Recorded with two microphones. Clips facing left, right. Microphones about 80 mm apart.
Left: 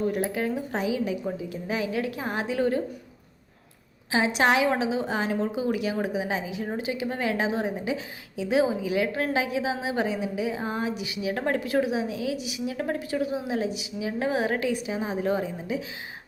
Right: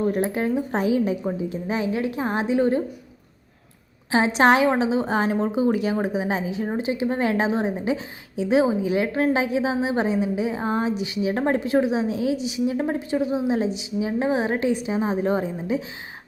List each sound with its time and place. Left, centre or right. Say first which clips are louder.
0.1 s a woman's voice: right 4 dB; right
0.8 s a woman's voice: right 5 dB; right
4.1 s a woman's voice: right 5 dB; right